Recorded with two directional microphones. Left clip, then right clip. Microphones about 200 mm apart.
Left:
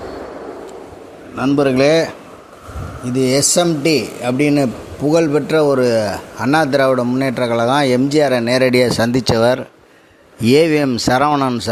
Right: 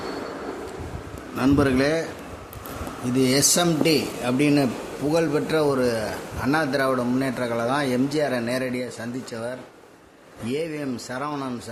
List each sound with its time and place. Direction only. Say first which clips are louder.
1.4 s speech: left 7 dB; 20° left (ahead or behind)
3.2 s a man's voice: left 6 dB; 25° left (ahead or behind); by 11.5 s 45° left (ahead or behind)